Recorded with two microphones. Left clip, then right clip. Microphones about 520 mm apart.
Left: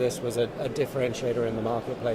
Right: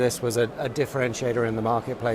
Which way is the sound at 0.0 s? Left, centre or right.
Right.